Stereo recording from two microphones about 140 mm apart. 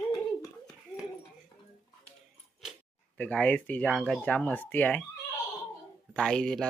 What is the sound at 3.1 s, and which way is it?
Speech, 10° left (ahead or behind).